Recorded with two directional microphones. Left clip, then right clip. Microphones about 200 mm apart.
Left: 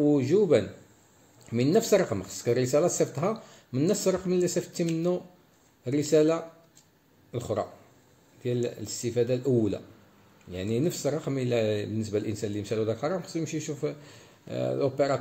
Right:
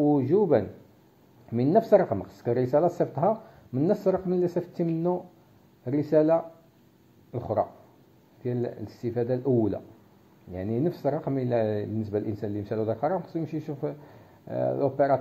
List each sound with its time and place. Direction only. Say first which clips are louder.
0.1 s speech: even; 15° left (ahead or behind)